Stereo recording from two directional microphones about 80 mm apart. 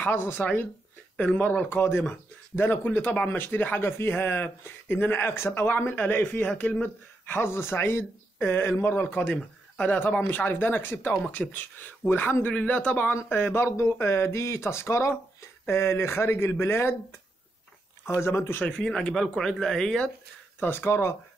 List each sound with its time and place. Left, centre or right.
0.0 s speech: left
12.5 s speech: centre
13.1 s speech: left
18.2 s speech: left
18.6 s speech: centre
20.5 s speech: left